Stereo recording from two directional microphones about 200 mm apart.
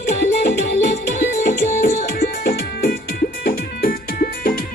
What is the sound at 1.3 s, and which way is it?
Music, 40° left (ahead or behind).